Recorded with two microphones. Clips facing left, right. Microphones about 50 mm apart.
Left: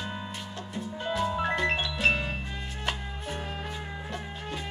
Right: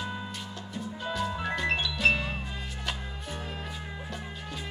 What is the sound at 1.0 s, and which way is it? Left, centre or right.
Music, left.